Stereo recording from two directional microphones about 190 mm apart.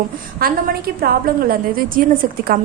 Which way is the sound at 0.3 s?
50° right (ahead or behind).